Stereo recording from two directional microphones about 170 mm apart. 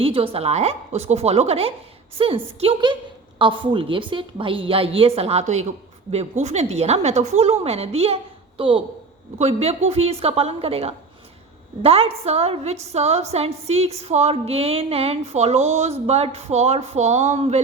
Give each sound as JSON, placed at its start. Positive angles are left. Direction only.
{"t": 0.0, "sound": "a woman's voice", "side_deg": -35}